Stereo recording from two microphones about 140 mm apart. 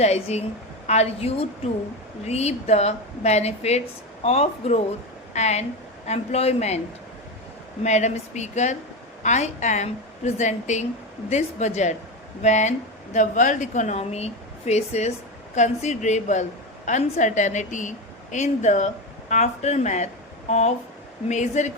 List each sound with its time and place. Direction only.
0.0 s a woman's voice: 50° left (ahead or behind)
7.9 s a woman's voice: 55° left (ahead or behind)